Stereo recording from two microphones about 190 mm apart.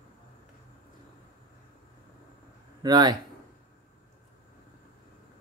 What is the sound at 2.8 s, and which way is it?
Speech, 20° right (ahead or behind).